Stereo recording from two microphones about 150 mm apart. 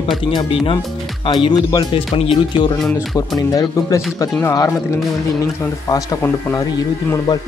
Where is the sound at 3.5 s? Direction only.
25° left (ahead or behind).